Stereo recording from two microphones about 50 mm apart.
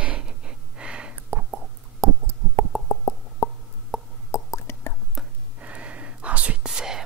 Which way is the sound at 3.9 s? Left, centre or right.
Centre.